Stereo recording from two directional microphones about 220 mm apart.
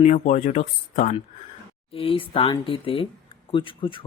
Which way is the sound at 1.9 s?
25° left (ahead or behind).